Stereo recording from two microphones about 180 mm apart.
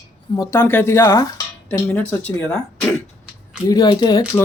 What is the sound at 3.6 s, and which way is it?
Speech, 25° left (ahead or behind).